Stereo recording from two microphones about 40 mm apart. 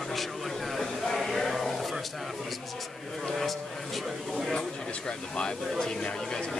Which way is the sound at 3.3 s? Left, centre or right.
Centre.